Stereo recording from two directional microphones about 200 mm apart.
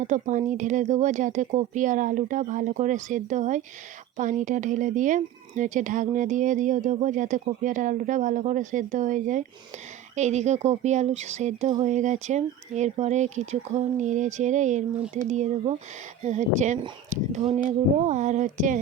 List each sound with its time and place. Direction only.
0.0 s speech: 40° right (ahead or behind)